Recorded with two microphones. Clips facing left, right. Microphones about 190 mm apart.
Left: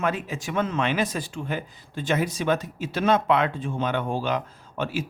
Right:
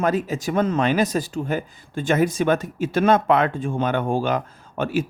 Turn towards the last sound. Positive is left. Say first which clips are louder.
# right 5 dB
turn(degrees=-50)  # may be behind; listen again after turning